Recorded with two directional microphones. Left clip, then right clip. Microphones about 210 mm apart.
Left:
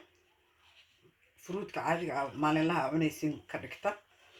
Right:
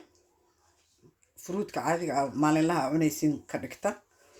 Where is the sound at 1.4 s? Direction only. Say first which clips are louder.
Right 4 dB; 55° right (ahead or behind).